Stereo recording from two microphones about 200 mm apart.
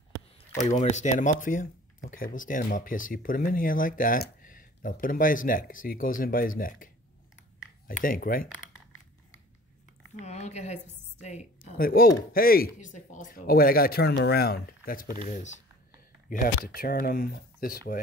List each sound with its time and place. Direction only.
0.7 s speech: 35° left (ahead or behind)
7.9 s speech: 45° left (ahead or behind)
10.2 s a woman's voice: 35° left (ahead or behind)
11.8 s speech: 45° left (ahead or behind)